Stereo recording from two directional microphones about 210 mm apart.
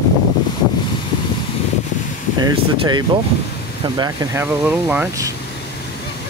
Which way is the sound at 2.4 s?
20° right (ahead or behind).